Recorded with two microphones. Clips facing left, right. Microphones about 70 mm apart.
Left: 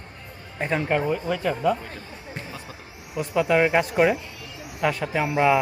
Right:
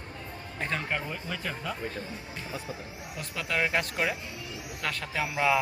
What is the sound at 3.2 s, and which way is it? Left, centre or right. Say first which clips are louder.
Speech: left 10 dB; centre.